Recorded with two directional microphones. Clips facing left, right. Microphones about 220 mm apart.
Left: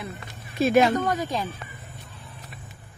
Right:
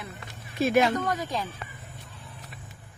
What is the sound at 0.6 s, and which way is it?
Speech, 30° left (ahead or behind).